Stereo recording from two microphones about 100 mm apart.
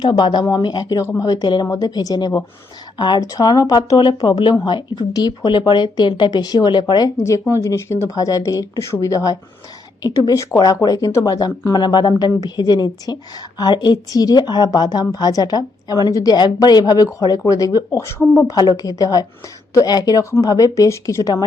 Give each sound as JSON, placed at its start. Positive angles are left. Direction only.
{"t": 0.0, "sound": "a woman's voice", "side_deg": 50}
{"t": 7.2, "sound": "a woman's voice", "side_deg": 30}
{"t": 18.5, "sound": "a woman's voice", "side_deg": 40}